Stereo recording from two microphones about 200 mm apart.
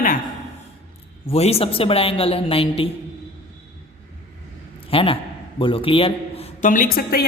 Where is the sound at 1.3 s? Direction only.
30° left (ahead or behind).